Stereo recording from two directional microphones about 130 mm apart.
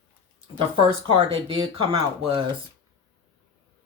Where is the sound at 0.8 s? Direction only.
40° right (ahead or behind).